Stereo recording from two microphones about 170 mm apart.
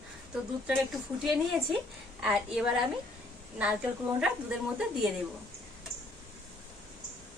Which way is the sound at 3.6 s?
5° right (ahead or behind).